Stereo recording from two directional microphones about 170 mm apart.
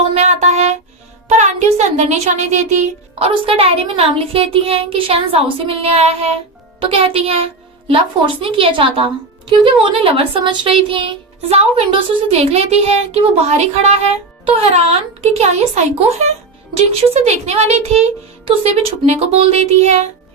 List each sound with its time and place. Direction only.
0.1 s music: 40° right (ahead or behind)
1.3 s speech: 40° right (ahead or behind)